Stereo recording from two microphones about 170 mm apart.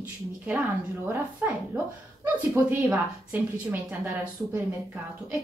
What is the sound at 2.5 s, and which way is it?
Speech, 15° right (ahead or behind).